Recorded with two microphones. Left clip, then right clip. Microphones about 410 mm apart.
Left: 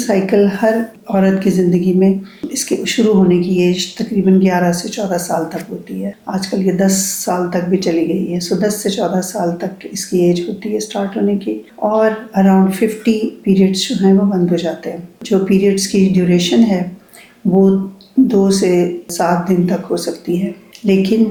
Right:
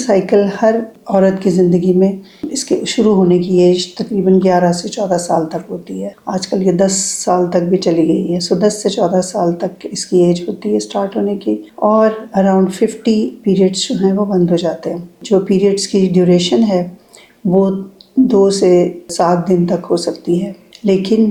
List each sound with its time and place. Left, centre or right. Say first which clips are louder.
0.0 s speech: right 2 dB; right
18.3 s speech: right 6 dB; right